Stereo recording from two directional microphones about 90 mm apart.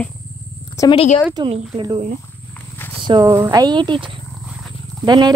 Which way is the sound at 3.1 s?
50° right (ahead or behind).